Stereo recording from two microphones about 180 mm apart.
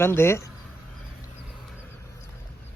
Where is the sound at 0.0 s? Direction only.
15° left (ahead or behind).